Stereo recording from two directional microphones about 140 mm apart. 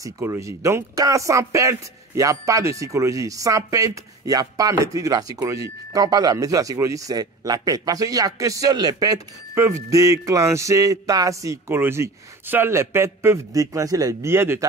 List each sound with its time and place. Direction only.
0.0 s speech: 20° right (ahead or behind)